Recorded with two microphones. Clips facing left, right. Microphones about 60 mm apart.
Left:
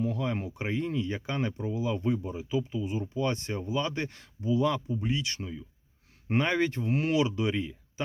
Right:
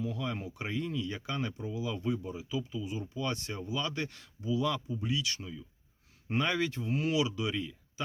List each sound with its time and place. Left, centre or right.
0.0 s speech: left